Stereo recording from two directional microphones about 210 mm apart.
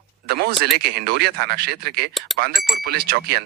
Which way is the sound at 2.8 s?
50° right (ahead or behind).